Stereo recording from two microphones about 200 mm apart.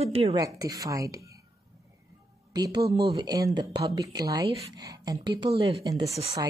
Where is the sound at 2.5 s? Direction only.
20° right (ahead or behind).